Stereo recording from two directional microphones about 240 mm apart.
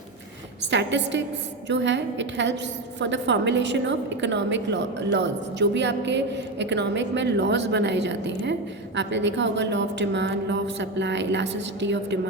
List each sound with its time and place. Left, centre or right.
0.7 s a woman's voice: right